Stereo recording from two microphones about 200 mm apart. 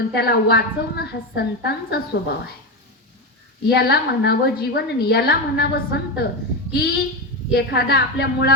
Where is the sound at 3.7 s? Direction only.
55° left (ahead or behind).